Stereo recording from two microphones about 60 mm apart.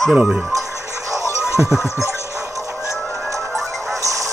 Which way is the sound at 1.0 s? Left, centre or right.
Right.